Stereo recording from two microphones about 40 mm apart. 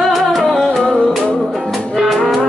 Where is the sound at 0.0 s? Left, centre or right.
Centre.